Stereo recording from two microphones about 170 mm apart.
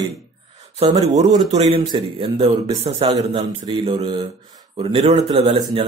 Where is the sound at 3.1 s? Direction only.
25° right (ahead or behind).